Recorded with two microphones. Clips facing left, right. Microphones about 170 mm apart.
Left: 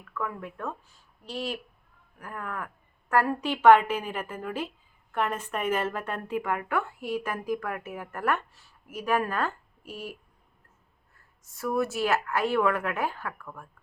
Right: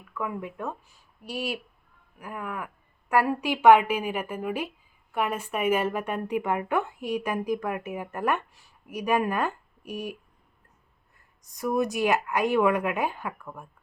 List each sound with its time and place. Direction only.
0.1 s speech: 15° right (ahead or behind)
11.4 s speech: 15° right (ahead or behind)